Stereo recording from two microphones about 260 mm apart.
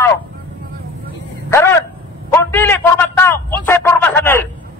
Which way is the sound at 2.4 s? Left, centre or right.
Centre.